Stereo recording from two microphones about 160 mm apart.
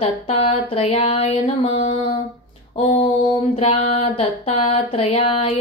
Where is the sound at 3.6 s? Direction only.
40° left (ahead or behind).